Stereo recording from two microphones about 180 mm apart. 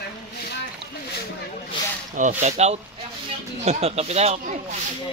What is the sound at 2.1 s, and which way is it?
Speech, 40° right (ahead or behind).